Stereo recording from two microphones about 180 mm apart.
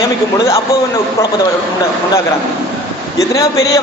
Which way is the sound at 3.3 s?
20° left (ahead or behind).